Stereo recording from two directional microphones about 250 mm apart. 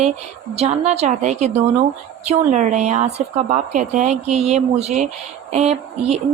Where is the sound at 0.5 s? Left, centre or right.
Right.